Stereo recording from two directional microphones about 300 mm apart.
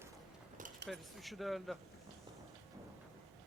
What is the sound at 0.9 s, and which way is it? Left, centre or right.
Speech, centre.